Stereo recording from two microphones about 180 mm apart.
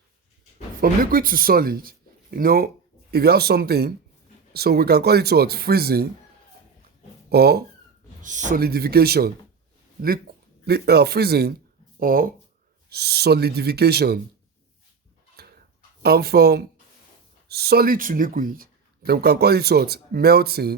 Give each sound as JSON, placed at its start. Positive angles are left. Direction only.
{"t": 0.8, "sound": "speech", "side_deg": -55}
{"t": 7.3, "sound": "speech", "side_deg": -60}
{"t": 8.2, "sound": "speech", "side_deg": -45}
{"t": 12.9, "sound": "speech", "side_deg": -65}
{"t": 15.4, "sound": "a sound", "side_deg": -60}
{"t": 16.0, "sound": "speech", "side_deg": -60}